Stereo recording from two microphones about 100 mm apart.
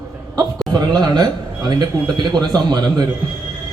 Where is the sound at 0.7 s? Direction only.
40° right (ahead or behind).